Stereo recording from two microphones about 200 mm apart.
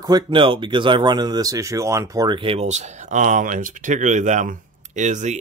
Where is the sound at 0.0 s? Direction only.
20° right (ahead or behind).